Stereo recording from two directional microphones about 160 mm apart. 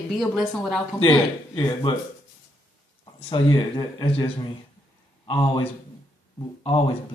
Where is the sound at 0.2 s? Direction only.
Centre (ahead or behind).